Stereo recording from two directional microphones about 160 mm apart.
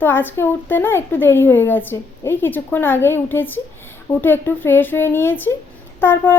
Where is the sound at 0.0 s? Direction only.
10° left (ahead or behind).